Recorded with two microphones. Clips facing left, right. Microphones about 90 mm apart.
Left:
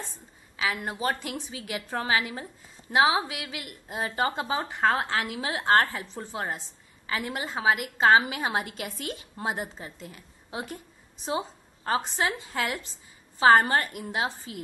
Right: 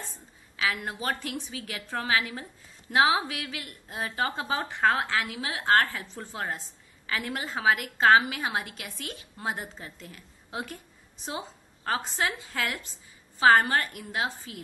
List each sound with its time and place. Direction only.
0.6 s a woman's voice: 25° left (ahead or behind)
4.8 s a woman's voice: 35° left (ahead or behind)